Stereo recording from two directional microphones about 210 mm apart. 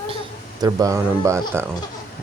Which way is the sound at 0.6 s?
15° right (ahead or behind).